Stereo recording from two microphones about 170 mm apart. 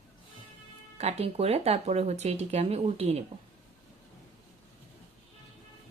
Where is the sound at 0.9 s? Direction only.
40° right (ahead or behind).